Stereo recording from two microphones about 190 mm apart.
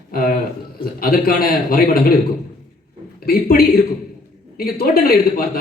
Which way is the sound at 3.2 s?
50° left (ahead or behind).